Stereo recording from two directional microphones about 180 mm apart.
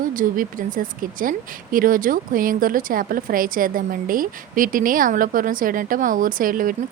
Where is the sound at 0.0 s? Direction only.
50° right (ahead or behind).